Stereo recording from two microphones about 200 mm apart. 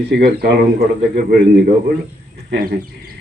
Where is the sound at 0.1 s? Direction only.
55° right (ahead or behind).